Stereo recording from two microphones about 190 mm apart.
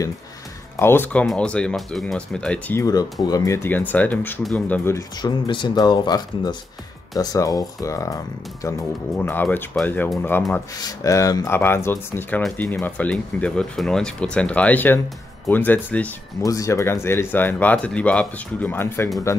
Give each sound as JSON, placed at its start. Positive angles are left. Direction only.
{"t": 0.7, "sound": "speech", "side_deg": 10}